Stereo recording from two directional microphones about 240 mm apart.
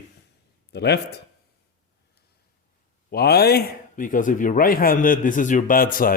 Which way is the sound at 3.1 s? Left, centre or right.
Left.